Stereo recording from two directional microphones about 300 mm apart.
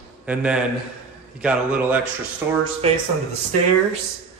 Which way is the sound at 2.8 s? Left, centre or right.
Centre.